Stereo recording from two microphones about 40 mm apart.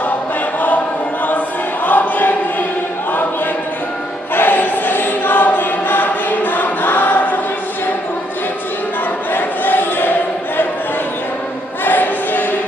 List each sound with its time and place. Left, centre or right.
1.8 s choir: left
4.4 s choir: left
9.3 s a sound: left
11.9 s choir: left